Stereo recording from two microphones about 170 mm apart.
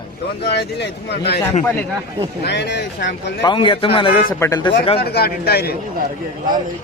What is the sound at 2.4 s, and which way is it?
Speech, 80° left.